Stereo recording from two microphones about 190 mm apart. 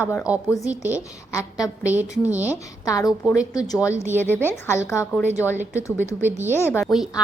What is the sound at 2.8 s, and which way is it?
Speech, 20° left (ahead or behind).